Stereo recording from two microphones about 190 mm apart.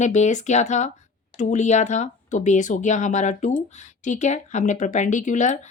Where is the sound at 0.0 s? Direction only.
40° left (ahead or behind).